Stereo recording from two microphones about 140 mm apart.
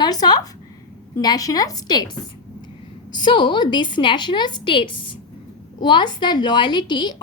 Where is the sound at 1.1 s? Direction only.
25° left (ahead or behind).